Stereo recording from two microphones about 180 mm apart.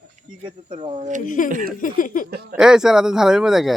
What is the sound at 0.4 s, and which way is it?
Speech, 30° right (ahead or behind).